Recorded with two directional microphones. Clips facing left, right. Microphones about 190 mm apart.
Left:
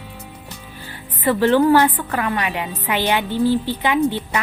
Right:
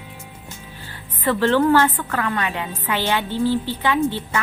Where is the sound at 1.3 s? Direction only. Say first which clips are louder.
Left 2 dB; 15° left (ahead or behind).